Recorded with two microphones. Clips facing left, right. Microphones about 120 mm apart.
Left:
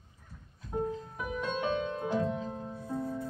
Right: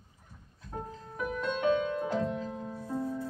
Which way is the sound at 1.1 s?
15° left (ahead or behind).